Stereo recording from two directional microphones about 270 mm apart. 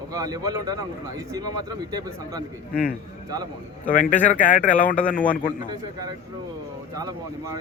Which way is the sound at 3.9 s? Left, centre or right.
Left.